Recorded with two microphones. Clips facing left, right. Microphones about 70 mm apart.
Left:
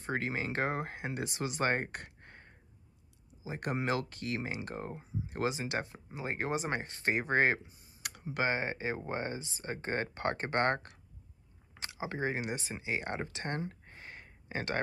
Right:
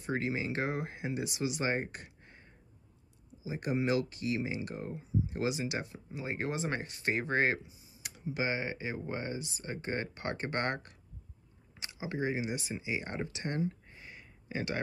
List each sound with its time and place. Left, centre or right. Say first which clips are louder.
0.0 s speech: right 1 dB; left
6.9 s speech: left 3 dB; left
7.6 s speech: left 4 dB; left
12.0 s speech: right 1 dB; left